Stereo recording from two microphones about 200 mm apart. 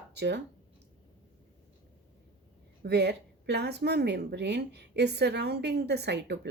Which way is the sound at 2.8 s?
55° right (ahead or behind).